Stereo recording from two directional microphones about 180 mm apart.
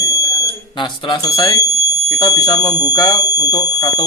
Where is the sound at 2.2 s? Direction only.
20° left (ahead or behind).